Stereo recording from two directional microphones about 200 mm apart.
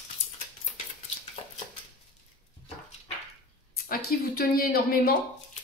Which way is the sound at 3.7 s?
45° left (ahead or behind).